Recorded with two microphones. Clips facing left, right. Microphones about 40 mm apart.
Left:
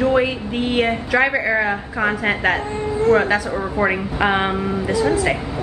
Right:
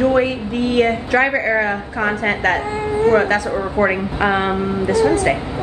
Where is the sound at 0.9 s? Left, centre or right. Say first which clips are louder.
Right 1 dB; centre.